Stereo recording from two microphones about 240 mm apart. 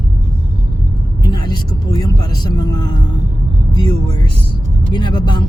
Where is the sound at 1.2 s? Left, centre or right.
Centre.